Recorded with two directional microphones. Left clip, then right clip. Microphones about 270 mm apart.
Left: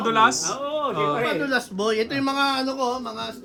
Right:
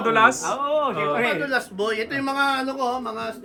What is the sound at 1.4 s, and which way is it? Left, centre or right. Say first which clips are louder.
Speech: even; left.